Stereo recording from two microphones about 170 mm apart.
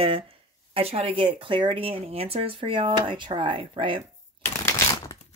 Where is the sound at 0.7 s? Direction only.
35° right (ahead or behind).